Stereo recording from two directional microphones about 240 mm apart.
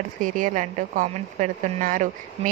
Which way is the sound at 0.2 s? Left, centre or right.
Right.